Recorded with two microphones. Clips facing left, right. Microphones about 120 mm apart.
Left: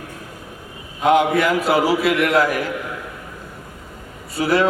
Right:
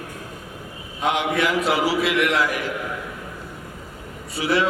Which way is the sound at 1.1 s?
45° left (ahead or behind).